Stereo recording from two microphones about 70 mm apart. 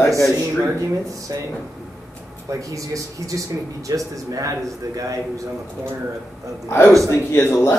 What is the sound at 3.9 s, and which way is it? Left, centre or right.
A man's voice, right.